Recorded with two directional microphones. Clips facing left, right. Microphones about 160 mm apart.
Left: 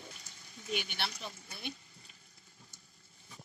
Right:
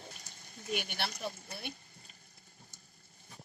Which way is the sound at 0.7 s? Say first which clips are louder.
Right 1 dB; 50° right (ahead or behind).